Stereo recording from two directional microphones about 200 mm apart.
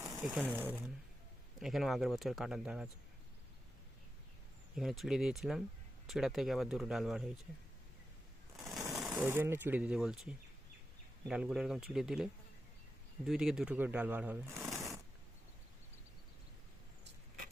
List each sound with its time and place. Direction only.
0.0 s sewing machine: centre (ahead or behind)
0.5 s speech: 10° right (ahead or behind)
4.7 s speech: centre (ahead or behind)
8.5 s sewing machine: centre (ahead or behind)
9.2 s speech: 10° right (ahead or behind)
14.8 s a sound: centre (ahead or behind)
17.0 s vehicle: 45° right (ahead or behind)